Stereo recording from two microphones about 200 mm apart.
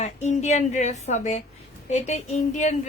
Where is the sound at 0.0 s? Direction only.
35° left (ahead or behind).